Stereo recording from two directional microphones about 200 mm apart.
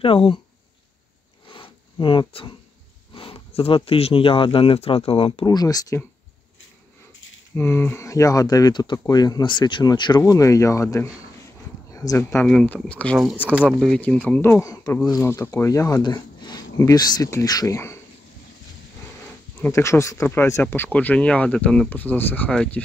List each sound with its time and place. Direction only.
0.0 s speech: 25° left (ahead or behind)
1.5 s a sound: 25° left (ahead or behind)
3.2 s speech: 30° left (ahead or behind)
7.5 s speech: 10° left (ahead or behind)
19.6 s speech: 15° left (ahead or behind)